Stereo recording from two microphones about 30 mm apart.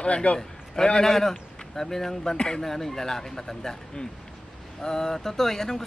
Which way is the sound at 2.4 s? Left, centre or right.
Left.